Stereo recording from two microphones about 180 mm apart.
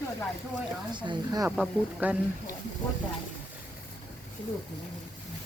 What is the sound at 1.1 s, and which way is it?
Speech, 20° right (ahead or behind).